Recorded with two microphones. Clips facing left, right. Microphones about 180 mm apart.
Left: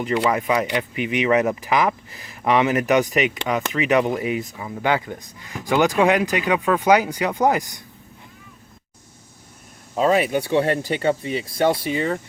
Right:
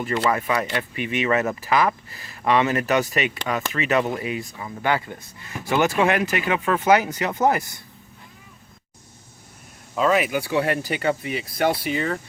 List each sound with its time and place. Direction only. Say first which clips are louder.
0.0 s speech: left 2 dB; 15° left (ahead or behind)
9.9 s speech: left 2 dB; 35° left (ahead or behind)